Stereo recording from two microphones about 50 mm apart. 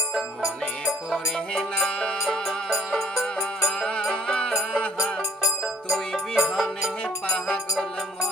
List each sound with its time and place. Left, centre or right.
1.5 s music: centre
3.8 s music: left
5.9 s music: centre
7.3 s music: centre